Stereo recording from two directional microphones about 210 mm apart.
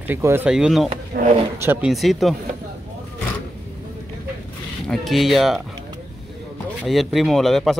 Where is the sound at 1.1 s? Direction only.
35° right (ahead or behind).